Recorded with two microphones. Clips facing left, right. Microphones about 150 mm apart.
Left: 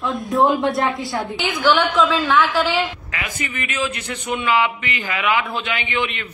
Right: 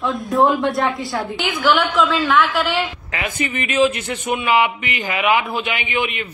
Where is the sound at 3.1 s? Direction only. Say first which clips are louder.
Right 5 dB; 25° right (ahead or behind); by 6.2 s 10° right (ahead or behind).